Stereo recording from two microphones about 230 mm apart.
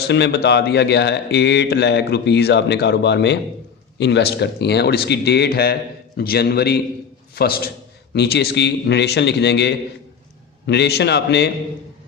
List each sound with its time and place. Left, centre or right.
0.1 s a man's voice: left